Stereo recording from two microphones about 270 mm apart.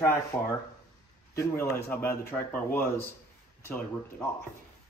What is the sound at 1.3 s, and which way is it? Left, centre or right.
Speech, centre.